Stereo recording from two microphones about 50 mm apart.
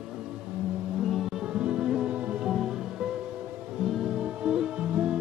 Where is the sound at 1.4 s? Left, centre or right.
Centre.